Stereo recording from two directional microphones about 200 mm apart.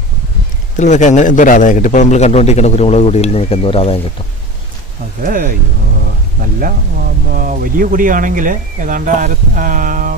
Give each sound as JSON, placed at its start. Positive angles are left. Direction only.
{"t": 0.7, "sound": "a man's voice", "side_deg": 35}
{"t": 5.2, "sound": "speech", "side_deg": -45}